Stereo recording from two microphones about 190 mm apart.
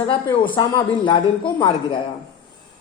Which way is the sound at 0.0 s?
25° left (ahead or behind).